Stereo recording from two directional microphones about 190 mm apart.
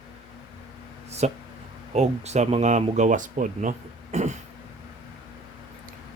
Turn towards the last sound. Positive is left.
turn(degrees=-35)  # may be behind; listen again after turning